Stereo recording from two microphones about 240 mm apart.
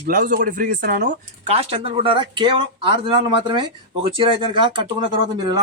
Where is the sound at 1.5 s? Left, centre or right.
Right.